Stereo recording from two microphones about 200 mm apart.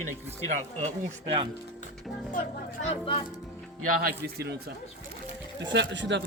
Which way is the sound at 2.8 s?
25° left (ahead or behind).